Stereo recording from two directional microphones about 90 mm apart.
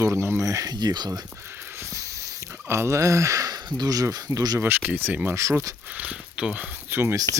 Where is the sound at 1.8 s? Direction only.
40° right (ahead or behind).